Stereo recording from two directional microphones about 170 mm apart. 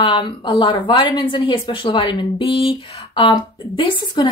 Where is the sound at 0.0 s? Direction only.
30° left (ahead or behind).